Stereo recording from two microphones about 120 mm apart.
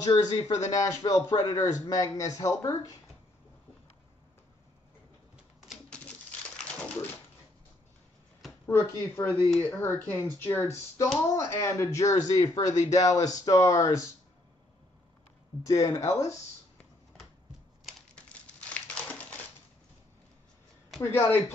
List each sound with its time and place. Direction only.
0.0 s speech: 30° left (ahead or behind)
5.9 s typewriter: 10° left (ahead or behind)
8.6 s speech: 20° left (ahead or behind)
15.6 s speech: 25° left (ahead or behind)
18.1 s crumpling: 10° left (ahead or behind)
21.0 s speech: 20° left (ahead or behind)